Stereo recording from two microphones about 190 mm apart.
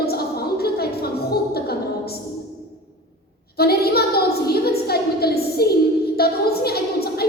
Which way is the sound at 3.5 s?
55° left (ahead or behind).